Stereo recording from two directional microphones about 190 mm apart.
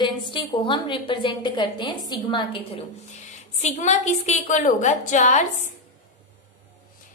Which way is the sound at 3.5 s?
40° left (ahead or behind).